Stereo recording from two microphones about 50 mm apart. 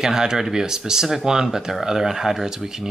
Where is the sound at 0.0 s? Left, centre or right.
Centre.